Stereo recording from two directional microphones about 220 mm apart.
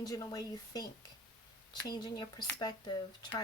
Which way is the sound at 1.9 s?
20° left (ahead or behind).